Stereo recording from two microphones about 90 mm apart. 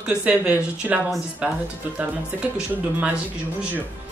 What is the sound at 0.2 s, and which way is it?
Speech, 15° right (ahead or behind).